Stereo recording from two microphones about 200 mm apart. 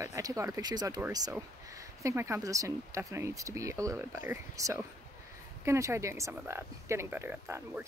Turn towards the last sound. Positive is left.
turn(degrees=-10)  # may be behind; listen again after turning